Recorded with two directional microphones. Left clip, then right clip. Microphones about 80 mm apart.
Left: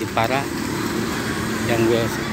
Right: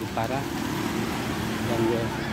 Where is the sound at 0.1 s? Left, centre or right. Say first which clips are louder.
Left 9 dB; centre.